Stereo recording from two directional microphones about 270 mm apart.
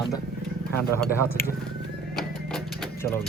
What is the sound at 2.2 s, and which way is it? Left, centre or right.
Music, centre.